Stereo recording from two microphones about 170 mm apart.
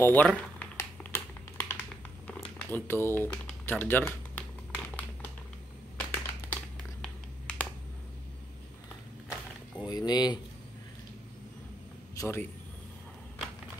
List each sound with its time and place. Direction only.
0.0 s speech: 10° left (ahead or behind)
0.6 s a sound: 15° left (ahead or behind)
2.2 s typing: 10° left (ahead or behind)
5.9 s a sound: 10° left (ahead or behind)
9.8 s speech: 25° left (ahead or behind)
12.2 s speech: 15° left (ahead or behind)